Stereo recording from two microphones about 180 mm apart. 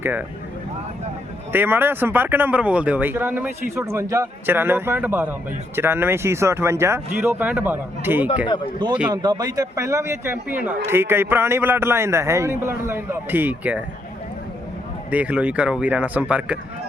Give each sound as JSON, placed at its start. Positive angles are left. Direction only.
{"t": 0.0, "sound": "speech", "side_deg": -10}
{"t": 1.5, "sound": "speech", "side_deg": -10}
{"t": 8.8, "sound": "a man's voice", "side_deg": -25}
{"t": 15.1, "sound": "speech", "side_deg": -5}